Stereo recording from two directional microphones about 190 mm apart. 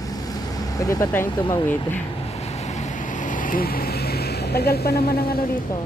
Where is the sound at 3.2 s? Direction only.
45° left (ahead or behind).